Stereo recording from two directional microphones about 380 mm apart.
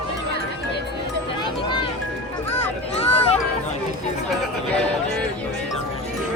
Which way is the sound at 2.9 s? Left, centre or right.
Centre.